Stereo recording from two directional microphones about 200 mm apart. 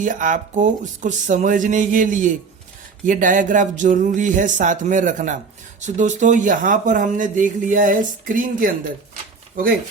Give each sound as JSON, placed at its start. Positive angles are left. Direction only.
{"t": 0.0, "sound": "speech", "side_deg": -40}